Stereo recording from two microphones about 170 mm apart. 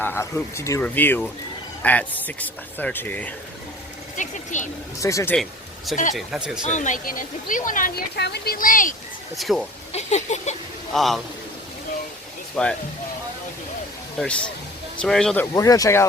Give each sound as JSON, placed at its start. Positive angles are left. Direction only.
{"t": 0.0, "sound": "speech", "side_deg": 15}
{"t": 4.2, "sound": "speech", "side_deg": 45}
{"t": 4.9, "sound": "speech", "side_deg": 20}
{"t": 5.4, "sound": "speech", "side_deg": 0}
{"t": 6.7, "sound": "speech", "side_deg": 45}
{"t": 8.2, "sound": "speech", "side_deg": 70}
{"t": 9.3, "sound": "speech", "side_deg": 0}
{"t": 9.9, "sound": "a sound", "side_deg": 40}
{"t": 10.9, "sound": "speech", "side_deg": 0}
{"t": 12.6, "sound": "speech", "side_deg": 5}
{"t": 14.2, "sound": "speech", "side_deg": 5}
{"t": 15.5, "sound": "speech", "side_deg": 20}